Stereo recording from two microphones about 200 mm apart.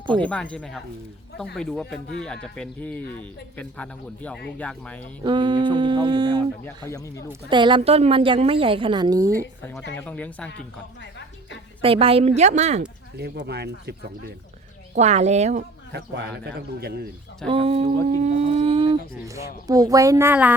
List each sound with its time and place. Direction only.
0.1 s speech: 5° left (ahead or behind)
5.2 s a woman's voice: 20° right (ahead or behind)
6.7 s speech: 15° left (ahead or behind)
7.5 s a woman's voice: 25° right (ahead or behind)
9.9 s speech: 10° left (ahead or behind)
11.8 s a woman's voice: 30° right (ahead or behind)
13.1 s a man's voice: 55° right (ahead or behind)
14.9 s a woman's voice: 35° right (ahead or behind)
15.9 s a man's voice: 55° right (ahead or behind)
17.5 s speech: 30° right (ahead or behind)
19.3 s speech: 15° right (ahead or behind)